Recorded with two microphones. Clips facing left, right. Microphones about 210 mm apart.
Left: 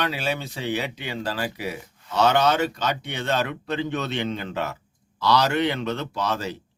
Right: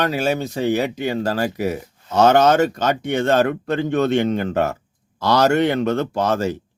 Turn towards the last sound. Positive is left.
turn(degrees=-45)  # may be behind; listen again after turning